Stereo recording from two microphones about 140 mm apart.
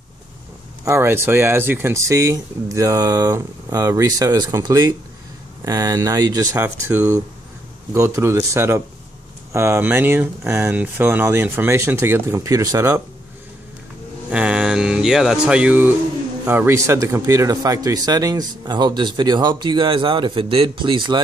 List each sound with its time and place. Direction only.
0.8 s speech: 20° right (ahead or behind)
14.3 s speech: 5° right (ahead or behind); by 21.2 s 35° right (ahead or behind)